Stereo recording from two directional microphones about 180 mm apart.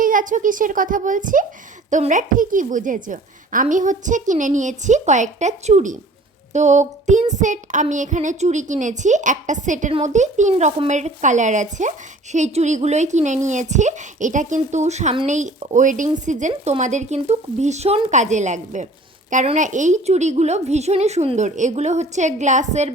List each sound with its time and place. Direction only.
0.0 s a woman's voice: 45° right (ahead or behind)
6.5 s music: 40° right (ahead or behind)
7.3 s a woman's voice: 45° right (ahead or behind)